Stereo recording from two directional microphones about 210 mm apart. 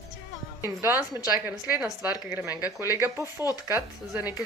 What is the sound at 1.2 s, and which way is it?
Speech, 10° right (ahead or behind).